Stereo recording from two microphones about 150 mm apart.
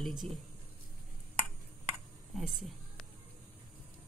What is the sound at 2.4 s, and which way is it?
Speech, 5° right (ahead or behind).